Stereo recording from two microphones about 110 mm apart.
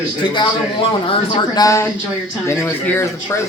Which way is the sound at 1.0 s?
50° left (ahead or behind).